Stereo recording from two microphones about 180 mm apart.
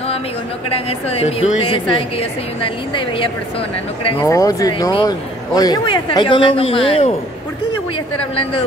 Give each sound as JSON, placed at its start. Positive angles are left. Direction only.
{"t": 0.7, "sound": "a woman's voice", "side_deg": 35}
{"t": 4.2, "sound": "speech", "side_deg": 15}
{"t": 8.2, "sound": "a woman's voice", "side_deg": 30}